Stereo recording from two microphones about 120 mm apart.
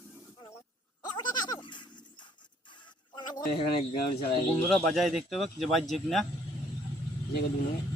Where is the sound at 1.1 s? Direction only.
40° left (ahead or behind).